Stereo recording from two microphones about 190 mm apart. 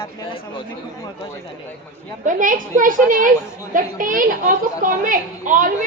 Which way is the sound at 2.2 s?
45° right (ahead or behind).